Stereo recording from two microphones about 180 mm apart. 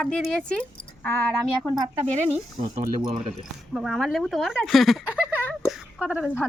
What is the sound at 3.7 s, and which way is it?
Speech, centre (ahead or behind).